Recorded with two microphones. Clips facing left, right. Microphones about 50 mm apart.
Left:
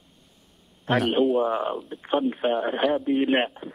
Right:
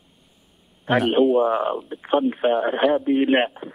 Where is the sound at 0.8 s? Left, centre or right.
Centre.